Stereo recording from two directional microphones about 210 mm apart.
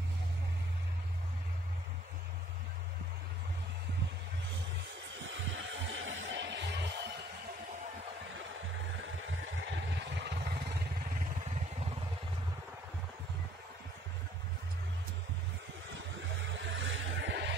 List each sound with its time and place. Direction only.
5.2 s music: 65° right (ahead or behind)
9.0 s vehicle: 65° right (ahead or behind)
11.1 s vehicle: 35° right (ahead or behind)
16.7 s music: 60° right (ahead or behind)